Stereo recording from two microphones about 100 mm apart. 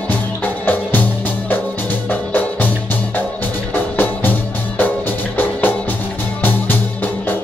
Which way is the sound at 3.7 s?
20° left (ahead or behind).